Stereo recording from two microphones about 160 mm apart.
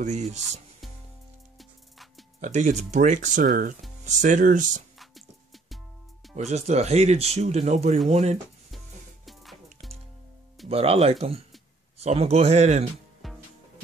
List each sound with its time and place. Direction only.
0.0 s speech: 45° right (ahead or behind)
0.4 s music: centre (ahead or behind)
2.4 s speech: 45° right (ahead or behind)
4.9 s music: centre (ahead or behind)
6.3 s speech: 45° right (ahead or behind)
8.7 s music: centre (ahead or behind)
10.7 s speech: 40° right (ahead or behind)
13.2 s music: centre (ahead or behind)